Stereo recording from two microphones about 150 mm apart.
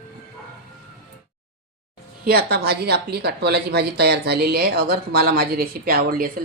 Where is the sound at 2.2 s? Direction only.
90° right.